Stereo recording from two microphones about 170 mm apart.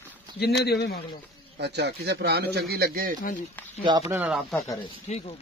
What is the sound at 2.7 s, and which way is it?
Speech, 60° right (ahead or behind).